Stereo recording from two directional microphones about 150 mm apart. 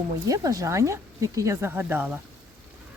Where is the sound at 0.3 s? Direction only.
25° right (ahead or behind).